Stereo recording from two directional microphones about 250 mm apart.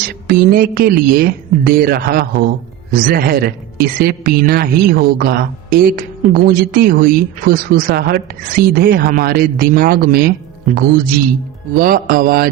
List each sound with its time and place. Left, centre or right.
0.1 s a woman's voice: right
11.7 s a woman's voice: right